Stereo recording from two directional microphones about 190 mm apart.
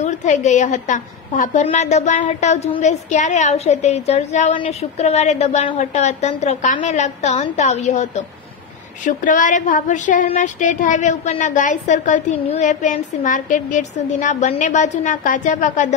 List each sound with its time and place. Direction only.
0.0 s speech: 40° left (ahead or behind)